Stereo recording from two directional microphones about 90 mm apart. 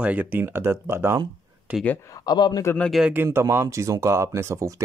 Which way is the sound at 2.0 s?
40° left (ahead or behind).